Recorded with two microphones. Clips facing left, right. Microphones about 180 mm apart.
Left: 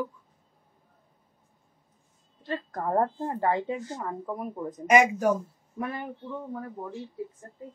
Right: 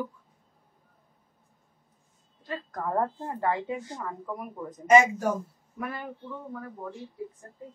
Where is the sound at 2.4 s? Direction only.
30° left (ahead or behind).